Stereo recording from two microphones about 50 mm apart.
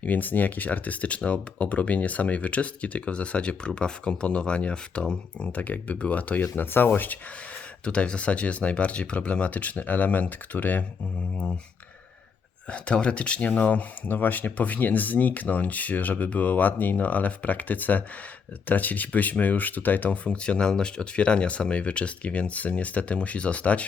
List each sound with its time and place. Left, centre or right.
0.0 s speech: left; by 5.5 s centre
5.5 s speech: left
6.7 s speech: left
7.9 s speech: left
12.7 s speech: left
14.1 s speech: left
20.2 s speech: left